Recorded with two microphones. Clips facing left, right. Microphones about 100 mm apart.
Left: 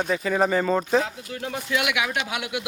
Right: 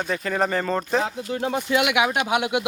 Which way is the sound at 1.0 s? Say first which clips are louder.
Right 6 dB; 30° right (ahead or behind).